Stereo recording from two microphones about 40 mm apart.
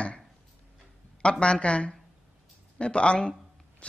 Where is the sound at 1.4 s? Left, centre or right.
Left.